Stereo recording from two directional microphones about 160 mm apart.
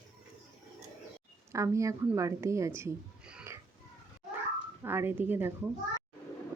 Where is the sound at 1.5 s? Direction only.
20° right (ahead or behind).